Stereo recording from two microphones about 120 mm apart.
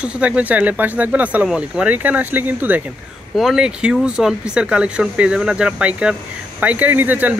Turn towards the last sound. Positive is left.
turn(degrees=-15)  # may be behind; listen again after turning